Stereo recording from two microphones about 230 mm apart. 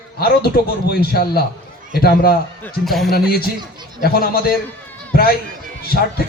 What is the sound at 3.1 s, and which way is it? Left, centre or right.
A man's voice, left.